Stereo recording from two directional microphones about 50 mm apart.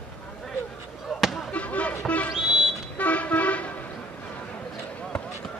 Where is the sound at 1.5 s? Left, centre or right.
Left.